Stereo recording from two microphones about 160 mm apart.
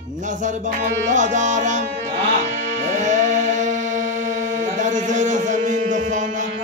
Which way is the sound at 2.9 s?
50° right (ahead or behind).